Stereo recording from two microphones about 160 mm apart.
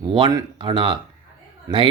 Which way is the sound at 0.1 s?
25° right (ahead or behind).